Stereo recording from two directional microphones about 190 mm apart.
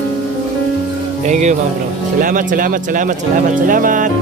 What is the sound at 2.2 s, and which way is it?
Speech, 45° right (ahead or behind).